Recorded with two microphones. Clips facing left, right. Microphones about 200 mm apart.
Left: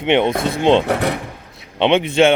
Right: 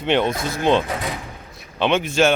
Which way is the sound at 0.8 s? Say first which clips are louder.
Left 8 dB; 70° left (ahead or behind).